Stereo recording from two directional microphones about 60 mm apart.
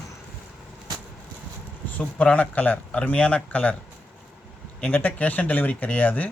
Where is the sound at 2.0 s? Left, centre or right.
Centre.